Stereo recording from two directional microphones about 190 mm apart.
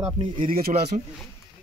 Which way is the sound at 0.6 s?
50° right (ahead or behind).